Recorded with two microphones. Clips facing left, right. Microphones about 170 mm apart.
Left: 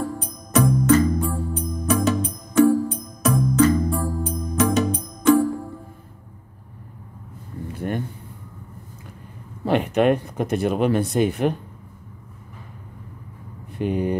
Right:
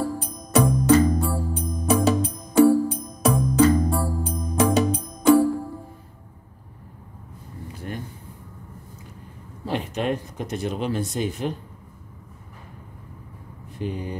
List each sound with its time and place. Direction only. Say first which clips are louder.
0.5 s music: even; 30° right (ahead or behind)
7.8 s a sound: left 7 dB; 50° left (ahead or behind)
9.7 s speech: left 7 dB; 60° left (ahead or behind)
13.7 s speech: left 7 dB; 60° left (ahead or behind)